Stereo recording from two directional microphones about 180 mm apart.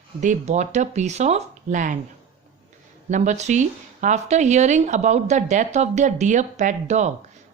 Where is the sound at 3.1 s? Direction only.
45° right (ahead or behind).